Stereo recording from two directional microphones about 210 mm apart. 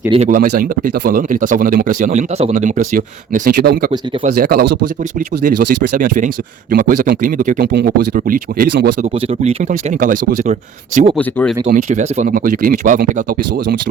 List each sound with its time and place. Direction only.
0.1 s speech: 35° right (ahead or behind); by 4.8 s 50° right (ahead or behind)
5.5 s speech: 40° right (ahead or behind)
9.0 s speech: 30° right (ahead or behind)
11.2 s speech: 5° left (ahead or behind)
11.6 s speech: 40° right (ahead or behind)